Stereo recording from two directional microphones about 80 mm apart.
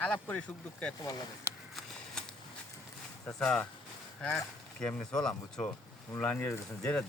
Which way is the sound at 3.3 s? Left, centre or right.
Centre.